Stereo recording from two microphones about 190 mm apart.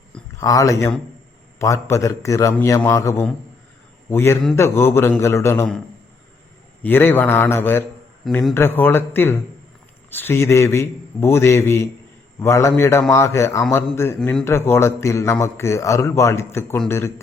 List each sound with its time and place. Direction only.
0.3 s a man's voice: 15° left (ahead or behind)
6.8 s a man's voice: 10° left (ahead or behind)
14.4 s a man's voice: 15° left (ahead or behind)